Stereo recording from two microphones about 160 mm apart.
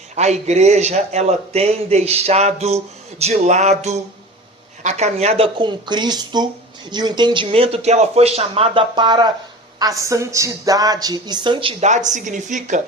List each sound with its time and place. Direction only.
0.2 s a man's voice: 45° right (ahead or behind)
11.9 s a man's voice: 50° right (ahead or behind)